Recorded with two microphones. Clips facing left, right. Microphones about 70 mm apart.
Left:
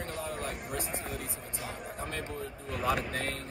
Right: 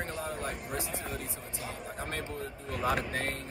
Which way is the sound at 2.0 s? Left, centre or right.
Right.